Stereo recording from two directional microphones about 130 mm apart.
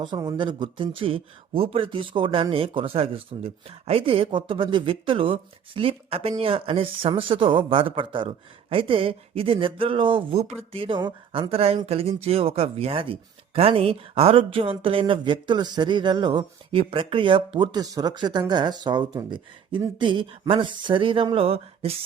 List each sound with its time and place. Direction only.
0.0 s speech: 30° right (ahead or behind); by 21.9 s 50° right (ahead or behind)